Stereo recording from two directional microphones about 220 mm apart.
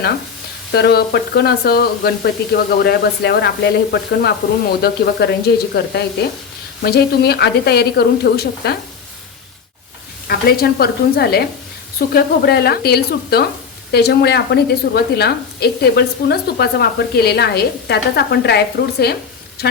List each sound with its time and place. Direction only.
0.7 s a woman's voice: 50° left (ahead or behind)
10.2 s a woman's voice: 45° left (ahead or behind)